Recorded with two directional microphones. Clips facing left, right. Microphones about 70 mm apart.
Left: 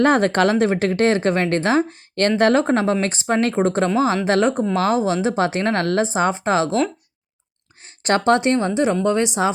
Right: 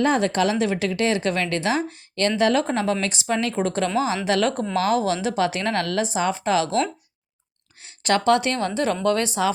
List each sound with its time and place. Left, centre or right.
0.0 s a woman's voice: left
4.4 s speech: centre
4.7 s a woman's voice: left
8.0 s speech: left